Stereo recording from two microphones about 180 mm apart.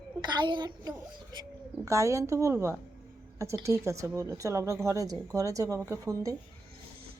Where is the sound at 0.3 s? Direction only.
25° right (ahead or behind).